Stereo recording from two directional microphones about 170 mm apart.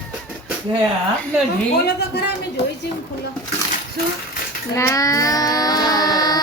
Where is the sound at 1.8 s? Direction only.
75° left (ahead or behind).